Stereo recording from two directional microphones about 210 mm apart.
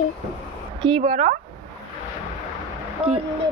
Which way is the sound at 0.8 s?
25° right (ahead or behind).